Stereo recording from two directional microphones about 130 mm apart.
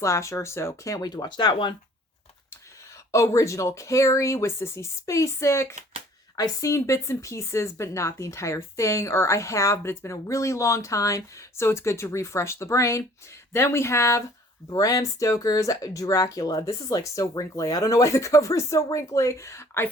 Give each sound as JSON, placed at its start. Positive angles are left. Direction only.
{"t": 0.0, "sound": "a woman's voice", "side_deg": 25}
{"t": 3.1, "sound": "a woman's voice", "side_deg": 25}